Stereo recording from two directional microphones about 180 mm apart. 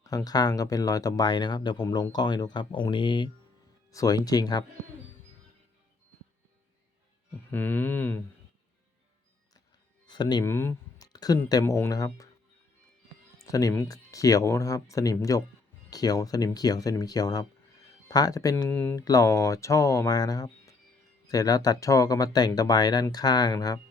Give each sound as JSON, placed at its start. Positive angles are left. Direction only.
{"t": 0.0, "sound": "speech", "side_deg": 20}
{"t": 7.5, "sound": "speech", "side_deg": 10}
{"t": 10.1, "sound": "speech", "side_deg": 25}
{"t": 13.4, "sound": "speech", "side_deg": 20}